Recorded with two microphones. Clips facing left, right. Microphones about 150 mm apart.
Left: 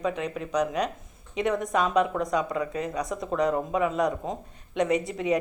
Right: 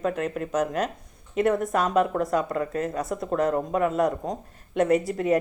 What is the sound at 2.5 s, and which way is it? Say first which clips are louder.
Speech: right 2 dB; 45° right (ahead or behind).